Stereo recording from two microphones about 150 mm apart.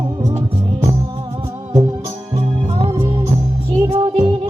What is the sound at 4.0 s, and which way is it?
Music, 30° right (ahead or behind).